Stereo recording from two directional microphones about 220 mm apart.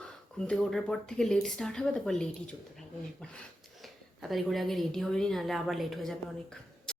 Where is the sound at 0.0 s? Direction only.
5° left (ahead or behind).